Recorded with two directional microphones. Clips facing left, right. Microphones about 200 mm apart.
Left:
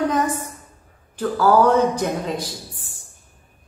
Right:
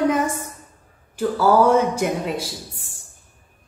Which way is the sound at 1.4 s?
10° right (ahead or behind).